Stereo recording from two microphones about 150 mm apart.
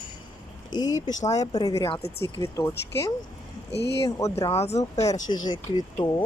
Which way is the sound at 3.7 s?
90° left.